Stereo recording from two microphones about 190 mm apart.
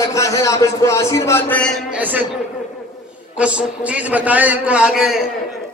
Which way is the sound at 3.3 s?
5° right (ahead or behind).